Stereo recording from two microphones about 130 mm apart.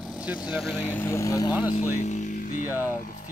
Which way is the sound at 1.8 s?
60° left (ahead or behind).